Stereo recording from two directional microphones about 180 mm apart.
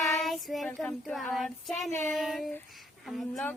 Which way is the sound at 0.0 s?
Centre (ahead or behind).